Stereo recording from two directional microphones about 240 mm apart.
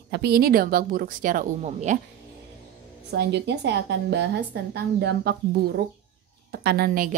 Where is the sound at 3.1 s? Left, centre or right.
Right.